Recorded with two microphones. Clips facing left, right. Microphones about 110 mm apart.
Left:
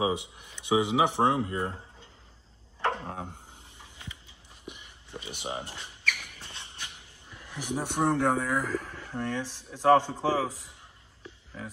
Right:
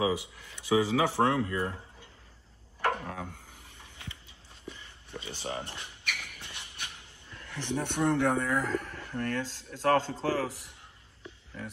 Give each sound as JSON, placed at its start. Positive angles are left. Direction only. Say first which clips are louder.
{"t": 0.0, "sound": "speech", "louder": "left 1 dB", "side_deg": 20}
{"t": 2.8, "sound": "a sound", "louder": "even", "side_deg": 25}
{"t": 7.9, "sound": "speech", "louder": "left 1 dB", "side_deg": 10}
{"t": 8.9, "sound": "a man's voice", "louder": "even", "side_deg": 20}